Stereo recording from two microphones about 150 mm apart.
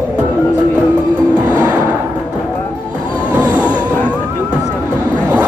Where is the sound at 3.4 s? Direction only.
25° right (ahead or behind).